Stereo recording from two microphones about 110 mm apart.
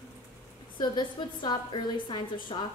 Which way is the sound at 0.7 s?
40° left (ahead or behind).